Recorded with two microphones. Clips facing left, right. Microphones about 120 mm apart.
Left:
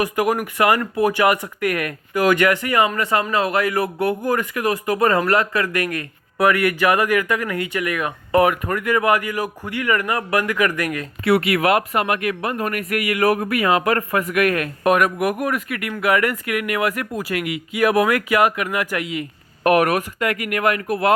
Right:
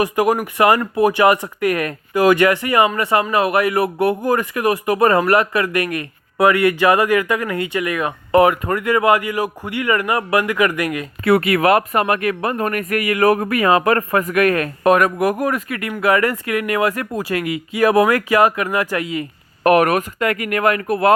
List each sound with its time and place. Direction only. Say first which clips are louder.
0.0 s speech: right 3 dB; 30° right (ahead or behind)
11.2 s a man's voice: right 3 dB; 45° right (ahead or behind)
19.6 s speech: right 3 dB; 50° right (ahead or behind)